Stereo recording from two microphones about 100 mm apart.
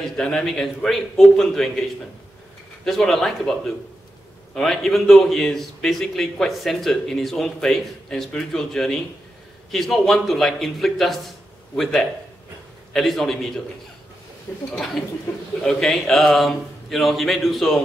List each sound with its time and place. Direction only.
0.0 s a man's voice: 5° left (ahead or behind)
2.8 s a man's voice: 5° left (ahead or behind)
4.6 s a man's voice: 5° left (ahead or behind)
14.5 s speech: 20° left (ahead or behind)
15.6 s a man's voice: 5° left (ahead or behind)